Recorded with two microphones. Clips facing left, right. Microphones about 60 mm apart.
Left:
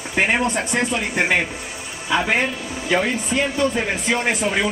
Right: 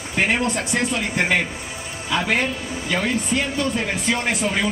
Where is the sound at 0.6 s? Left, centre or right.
Left.